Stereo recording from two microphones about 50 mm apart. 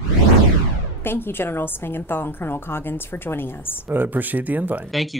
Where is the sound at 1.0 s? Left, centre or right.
Left.